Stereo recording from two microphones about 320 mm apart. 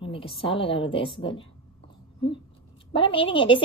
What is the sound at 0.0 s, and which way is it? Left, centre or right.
A woman's voice, centre.